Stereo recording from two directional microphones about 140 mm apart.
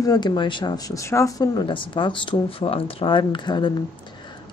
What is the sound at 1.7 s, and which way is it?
Speech, 35° left (ahead or behind).